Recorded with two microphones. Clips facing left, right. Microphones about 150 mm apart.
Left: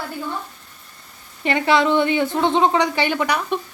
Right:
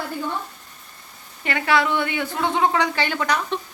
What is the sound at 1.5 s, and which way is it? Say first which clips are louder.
A woman's voice: left 4 dB; 20° left (ahead or behind).